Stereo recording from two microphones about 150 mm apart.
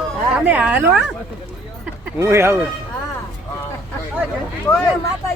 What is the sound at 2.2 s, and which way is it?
Speech, 20° right (ahead or behind).